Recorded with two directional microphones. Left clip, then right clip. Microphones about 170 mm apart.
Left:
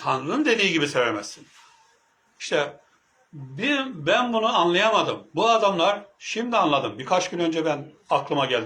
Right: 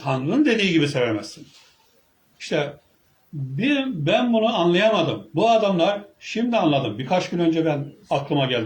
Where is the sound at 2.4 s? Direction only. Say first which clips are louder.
Even; 25° right (ahead or behind).